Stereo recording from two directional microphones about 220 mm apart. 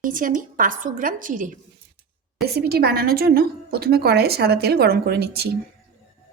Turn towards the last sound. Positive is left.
turn(degrees=-45)  # may be behind; listen again after turning